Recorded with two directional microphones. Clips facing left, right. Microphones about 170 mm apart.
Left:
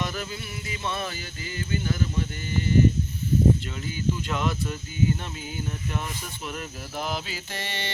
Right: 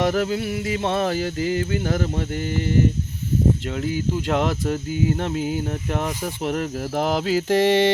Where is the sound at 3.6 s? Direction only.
70° right (ahead or behind).